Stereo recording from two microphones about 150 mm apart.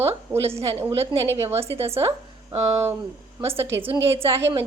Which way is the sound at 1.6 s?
40° right (ahead or behind).